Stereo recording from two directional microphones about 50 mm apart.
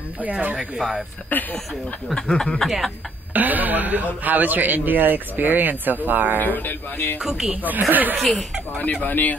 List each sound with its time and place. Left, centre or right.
0.2 s speech: right
0.7 s speech: centre
1.3 s speech: left
2.1 s speech: centre
2.6 s speech: centre
3.3 s speech: right
6.3 s speech: left
7.2 s speech: centre
7.9 s speech: right
8.2 s speech: centre
8.7 s speech: left